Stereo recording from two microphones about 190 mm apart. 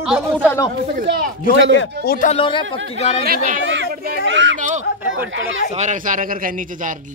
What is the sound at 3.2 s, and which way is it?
Speech, 50° right (ahead or behind).